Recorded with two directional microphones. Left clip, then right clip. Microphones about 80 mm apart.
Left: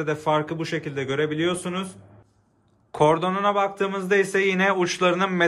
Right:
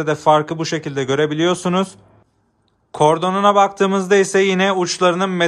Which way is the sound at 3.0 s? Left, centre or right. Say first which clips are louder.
Right 5 dB; right.